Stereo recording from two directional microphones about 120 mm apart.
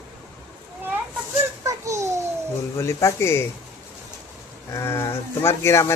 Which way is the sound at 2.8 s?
25° left (ahead or behind).